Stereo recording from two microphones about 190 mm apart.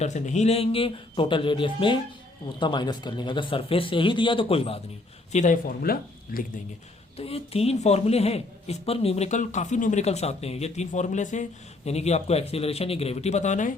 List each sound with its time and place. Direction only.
0.0 s speech: 40° left (ahead or behind)
5.3 s speech: 40° left (ahead or behind)
7.2 s a woman's voice: 30° left (ahead or behind)